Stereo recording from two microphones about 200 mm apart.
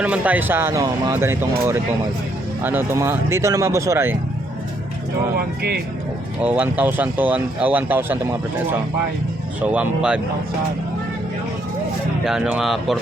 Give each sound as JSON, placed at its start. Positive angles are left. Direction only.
{"t": 0.0, "sound": "speech", "side_deg": -5}
{"t": 5.4, "sound": "speech", "side_deg": -50}
{"t": 6.4, "sound": "speech", "side_deg": -10}
{"t": 9.6, "sound": "speech", "side_deg": -5}
{"t": 12.2, "sound": "speech", "side_deg": -5}